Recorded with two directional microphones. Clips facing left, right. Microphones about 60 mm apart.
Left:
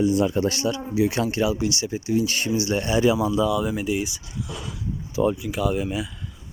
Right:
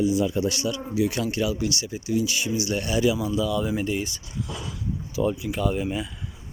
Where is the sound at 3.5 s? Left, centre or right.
Centre.